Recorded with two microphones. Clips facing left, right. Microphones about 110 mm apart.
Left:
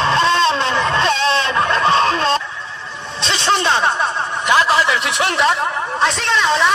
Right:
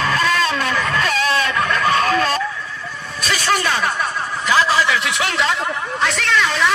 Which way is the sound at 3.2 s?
25° left (ahead or behind).